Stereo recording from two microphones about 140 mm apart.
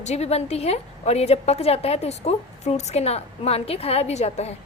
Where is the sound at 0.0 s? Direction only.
50° left (ahead or behind).